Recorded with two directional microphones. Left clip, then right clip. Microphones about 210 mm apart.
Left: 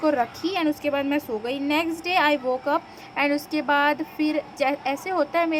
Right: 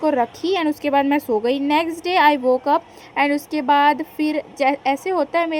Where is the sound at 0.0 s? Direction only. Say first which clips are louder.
Right 3 dB; 20° right (ahead or behind).